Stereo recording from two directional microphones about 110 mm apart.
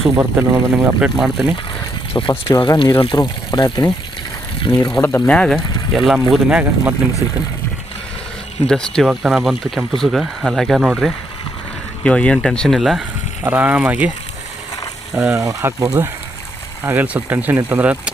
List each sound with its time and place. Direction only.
0.2 s speech: 20° right (ahead or behind)
1.2 s speech: 5° right (ahead or behind)
2.1 s speech: 35° left (ahead or behind)
5.2 s speech: 10° left (ahead or behind); by 7.4 s 15° right (ahead or behind)
8.6 s speech: 5° left (ahead or behind)
13.4 s speech: 15° right (ahead or behind)
15.3 s speech: 25° right (ahead or behind)